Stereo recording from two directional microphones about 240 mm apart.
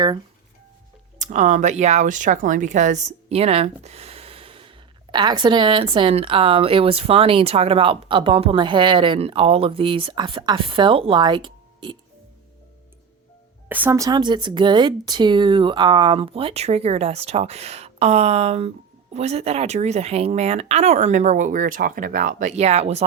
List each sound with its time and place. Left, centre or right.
1.2 s speech: right
13.7 s speech: centre; by 23.0 s right